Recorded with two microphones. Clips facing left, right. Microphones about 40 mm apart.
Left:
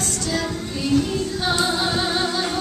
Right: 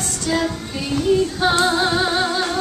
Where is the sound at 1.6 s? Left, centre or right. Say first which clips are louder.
Right 4 dB; centre.